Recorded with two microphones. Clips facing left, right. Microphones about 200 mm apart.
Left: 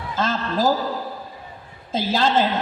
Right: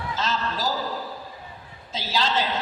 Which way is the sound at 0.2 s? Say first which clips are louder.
Left 7 dB; 55° left (ahead or behind).